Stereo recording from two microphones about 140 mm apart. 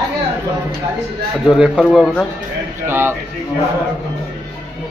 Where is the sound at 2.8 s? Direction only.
15° right (ahead or behind).